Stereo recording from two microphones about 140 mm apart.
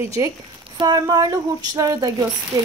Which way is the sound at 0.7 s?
30° right (ahead or behind).